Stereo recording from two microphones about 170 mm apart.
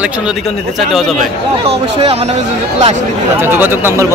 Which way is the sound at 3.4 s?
15° right (ahead or behind).